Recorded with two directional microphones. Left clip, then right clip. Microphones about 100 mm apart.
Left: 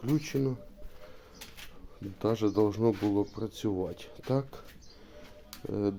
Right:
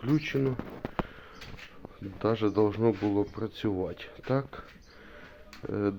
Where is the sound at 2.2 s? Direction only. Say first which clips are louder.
Right 1 dB; 20° left (ahead or behind).